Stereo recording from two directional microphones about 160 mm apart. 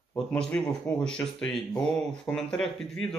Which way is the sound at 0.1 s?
5° left (ahead or behind).